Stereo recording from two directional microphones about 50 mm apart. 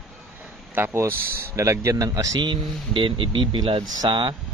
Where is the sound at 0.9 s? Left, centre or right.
Right.